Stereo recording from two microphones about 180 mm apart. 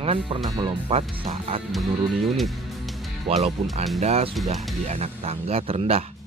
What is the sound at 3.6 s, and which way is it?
Speech, 40° right (ahead or behind).